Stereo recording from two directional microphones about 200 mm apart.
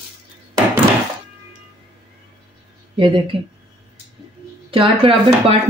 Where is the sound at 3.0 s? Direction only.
25° right (ahead or behind).